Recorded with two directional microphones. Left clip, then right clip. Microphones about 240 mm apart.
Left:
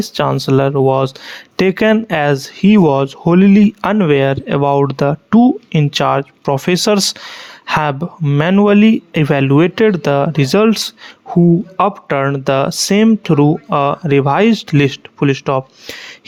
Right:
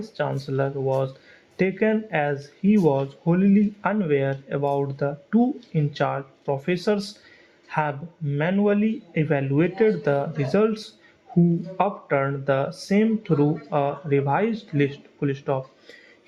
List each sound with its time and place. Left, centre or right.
0.1 s speech: left